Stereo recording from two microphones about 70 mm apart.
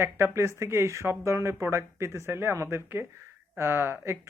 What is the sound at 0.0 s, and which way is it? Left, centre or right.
Speech, right.